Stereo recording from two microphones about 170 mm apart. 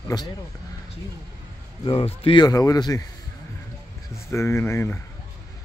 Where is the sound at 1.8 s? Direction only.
35° left (ahead or behind).